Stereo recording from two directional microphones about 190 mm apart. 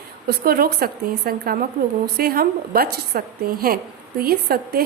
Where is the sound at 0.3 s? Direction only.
55° right (ahead or behind).